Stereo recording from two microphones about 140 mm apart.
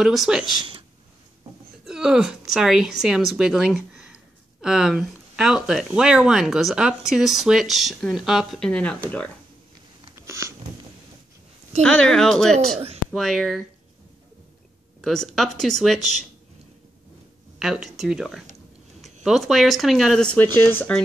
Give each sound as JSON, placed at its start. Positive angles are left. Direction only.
{"t": 0.0, "sound": "speech", "side_deg": 0}
{"t": 0.6, "sound": "a sound", "side_deg": -35}
{"t": 1.9, "sound": "speech", "side_deg": -5}
{"t": 10.1, "sound": "a sound", "side_deg": -20}
{"t": 11.8, "sound": "speech", "side_deg": 5}
{"t": 12.7, "sound": "speech", "side_deg": -50}
{"t": 13.1, "sound": "speech", "side_deg": 0}
{"t": 15.0, "sound": "speech", "side_deg": 0}
{"t": 17.6, "sound": "speech", "side_deg": 0}
{"t": 20.3, "sound": "speech", "side_deg": 15}